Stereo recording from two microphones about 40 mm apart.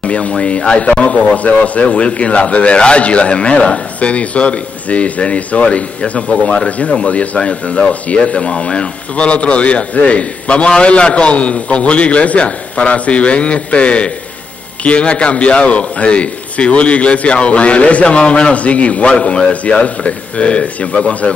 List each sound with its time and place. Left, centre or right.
0.0 s speech: left